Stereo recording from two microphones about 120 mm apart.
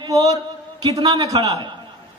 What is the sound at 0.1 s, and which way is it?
A man's voice, 30° right (ahead or behind).